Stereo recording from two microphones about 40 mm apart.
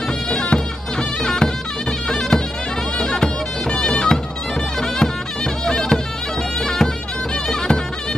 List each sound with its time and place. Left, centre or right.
0.3 s bagpipes: left
1.2 s music: centre
2.0 s bagpipes: centre
3.7 s music: left
6.6 s bagpipes: centre
7.4 s music: centre